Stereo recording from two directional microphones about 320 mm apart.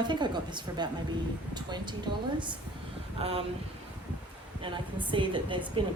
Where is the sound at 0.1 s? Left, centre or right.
Centre.